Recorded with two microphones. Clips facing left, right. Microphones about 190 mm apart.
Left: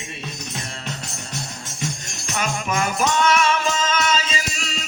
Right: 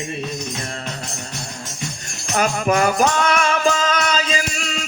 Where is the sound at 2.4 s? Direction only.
40° right (ahead or behind).